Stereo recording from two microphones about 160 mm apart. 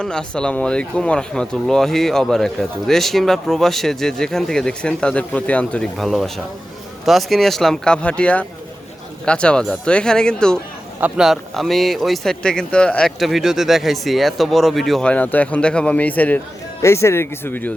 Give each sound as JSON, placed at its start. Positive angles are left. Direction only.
{"t": 0.0, "sound": "speech", "side_deg": 5}